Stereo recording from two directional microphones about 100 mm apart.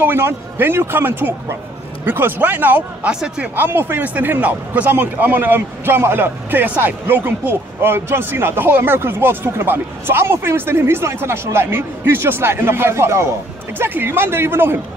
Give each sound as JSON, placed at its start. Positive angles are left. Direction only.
{"t": 0.0, "sound": "a man's voice", "side_deg": -20}